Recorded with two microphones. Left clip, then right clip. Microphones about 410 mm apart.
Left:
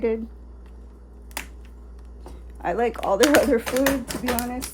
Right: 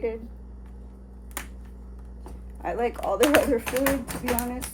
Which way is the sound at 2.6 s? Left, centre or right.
Left.